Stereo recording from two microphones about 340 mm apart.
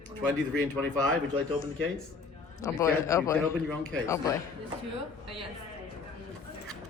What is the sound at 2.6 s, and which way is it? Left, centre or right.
Speech, centre.